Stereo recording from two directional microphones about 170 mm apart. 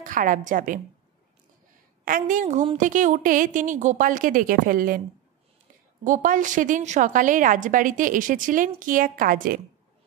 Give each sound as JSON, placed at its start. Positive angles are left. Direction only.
{"t": 0.0, "sound": "a woman's voice", "side_deg": -50}
{"t": 2.0, "sound": "a woman's voice", "side_deg": -50}
{"t": 6.0, "sound": "a woman's voice", "side_deg": -50}